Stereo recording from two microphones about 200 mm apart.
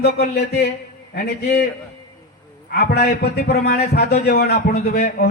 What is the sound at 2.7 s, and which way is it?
A man's voice, 55° left (ahead or behind).